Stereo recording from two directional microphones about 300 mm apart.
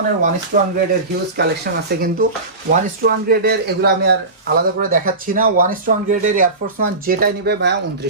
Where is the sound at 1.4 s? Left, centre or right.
Right.